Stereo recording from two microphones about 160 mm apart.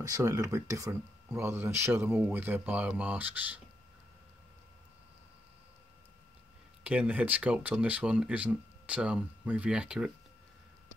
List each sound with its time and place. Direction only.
0.0 s speech: 20° right (ahead or behind)
6.8 s speech: 10° right (ahead or behind)